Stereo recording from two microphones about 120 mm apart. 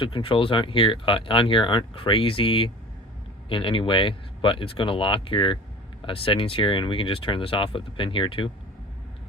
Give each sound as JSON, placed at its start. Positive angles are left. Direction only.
{"t": 0.0, "sound": "speech", "side_deg": 45}